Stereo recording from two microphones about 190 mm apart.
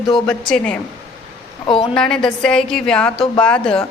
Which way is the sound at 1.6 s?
25° left (ahead or behind).